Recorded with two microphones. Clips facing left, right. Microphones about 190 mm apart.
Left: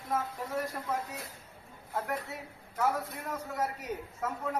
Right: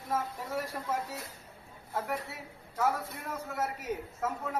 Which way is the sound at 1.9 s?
Centre (ahead or behind).